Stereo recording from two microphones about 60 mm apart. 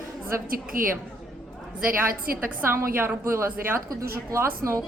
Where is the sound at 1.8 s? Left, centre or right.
Right.